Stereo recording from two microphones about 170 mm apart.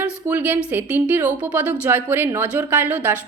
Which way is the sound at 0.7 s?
10° right (ahead or behind).